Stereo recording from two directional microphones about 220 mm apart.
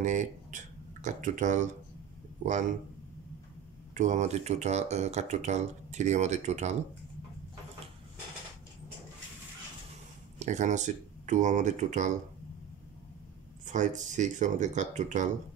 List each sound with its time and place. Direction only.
0.0 s speech: 35° right (ahead or behind)
3.9 s speech: 35° right (ahead or behind)
10.4 s speech: 35° right (ahead or behind)
13.7 s speech: 35° right (ahead or behind)